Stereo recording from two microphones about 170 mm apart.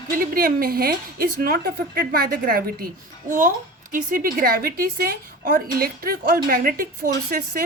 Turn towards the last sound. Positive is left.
turn(degrees=-60)  # may be behind; listen again after turning